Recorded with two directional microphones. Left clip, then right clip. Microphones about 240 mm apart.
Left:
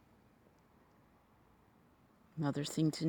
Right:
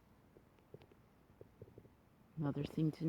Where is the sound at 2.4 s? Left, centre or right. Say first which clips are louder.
Left 4 dB; left.